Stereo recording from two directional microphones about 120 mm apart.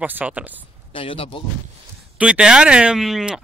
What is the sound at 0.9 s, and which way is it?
Speech, 50° left (ahead or behind).